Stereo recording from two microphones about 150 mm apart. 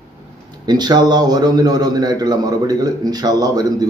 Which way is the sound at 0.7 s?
30° right (ahead or behind).